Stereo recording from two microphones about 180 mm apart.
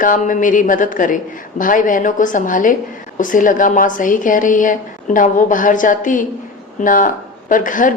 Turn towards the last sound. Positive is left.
turn(degrees=45)  # may be behind; listen again after turning